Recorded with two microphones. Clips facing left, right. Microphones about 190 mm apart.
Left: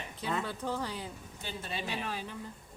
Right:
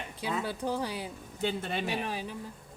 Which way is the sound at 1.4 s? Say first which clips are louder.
Right 9 dB; 60° right (ahead or behind).